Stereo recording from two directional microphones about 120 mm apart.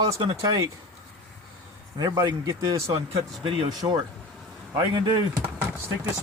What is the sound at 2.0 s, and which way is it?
Speech, 30° right (ahead or behind).